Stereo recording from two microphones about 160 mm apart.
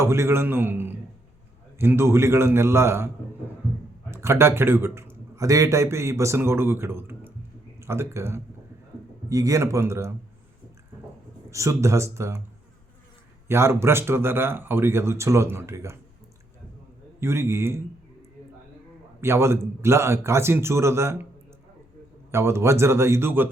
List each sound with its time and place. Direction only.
0.0 s speech: 15° right (ahead or behind)
4.1 s a man's voice: 15° right (ahead or behind)
11.5 s speech: 20° right (ahead or behind)
13.5 s speech: 15° right (ahead or behind)
17.2 s speech: 15° right (ahead or behind)
19.2 s speech: 15° right (ahead or behind)
22.3 s speech: 15° right (ahead or behind)